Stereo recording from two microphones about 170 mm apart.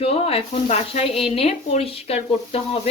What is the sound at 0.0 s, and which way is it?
Speech, 35° left (ahead or behind).